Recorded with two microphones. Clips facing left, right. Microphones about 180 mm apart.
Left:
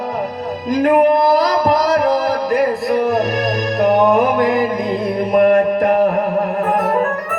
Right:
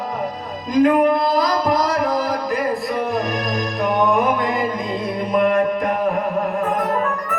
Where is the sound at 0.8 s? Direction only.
65° left (ahead or behind).